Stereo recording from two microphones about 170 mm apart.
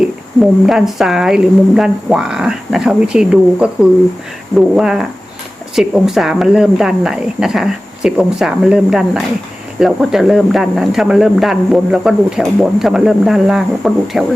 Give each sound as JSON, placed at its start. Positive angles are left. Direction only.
{"t": 0.6, "sound": "speech", "side_deg": 0}